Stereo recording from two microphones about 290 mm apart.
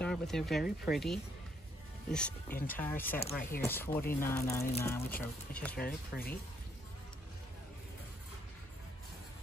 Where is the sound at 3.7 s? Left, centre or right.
Centre.